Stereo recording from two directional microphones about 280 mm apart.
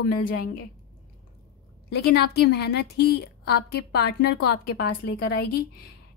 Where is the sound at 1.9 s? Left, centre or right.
Left.